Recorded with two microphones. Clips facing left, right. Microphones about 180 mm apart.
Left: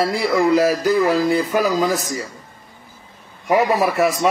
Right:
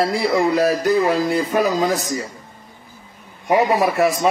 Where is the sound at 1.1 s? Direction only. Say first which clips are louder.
Left 1 dB; centre (ahead or behind).